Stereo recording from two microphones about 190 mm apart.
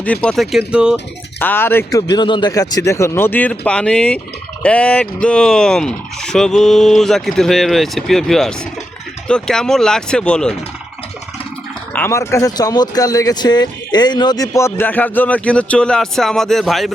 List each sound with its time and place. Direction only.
0.0 s speech: 5° left (ahead or behind)
1.4 s speech: 10° left (ahead or behind)
11.9 s speech: 15° left (ahead or behind)